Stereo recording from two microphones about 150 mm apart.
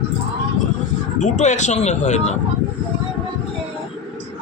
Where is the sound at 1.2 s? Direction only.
50° left (ahead or behind).